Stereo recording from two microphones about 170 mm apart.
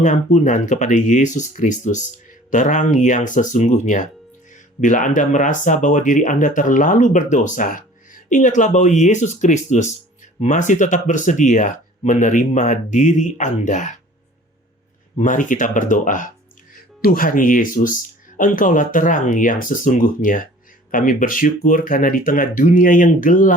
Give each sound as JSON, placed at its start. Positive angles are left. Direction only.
{"t": 0.0, "sound": "speech", "side_deg": 45}
{"t": 15.1, "sound": "speech", "side_deg": 50}